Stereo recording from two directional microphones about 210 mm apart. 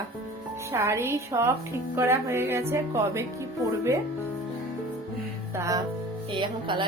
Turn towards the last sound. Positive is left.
turn(degrees=-25)  # may be behind; listen again after turning